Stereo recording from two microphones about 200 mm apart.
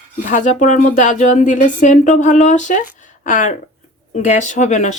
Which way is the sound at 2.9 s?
40° left (ahead or behind).